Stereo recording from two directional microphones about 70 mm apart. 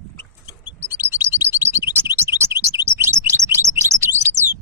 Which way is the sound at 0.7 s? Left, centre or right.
Right.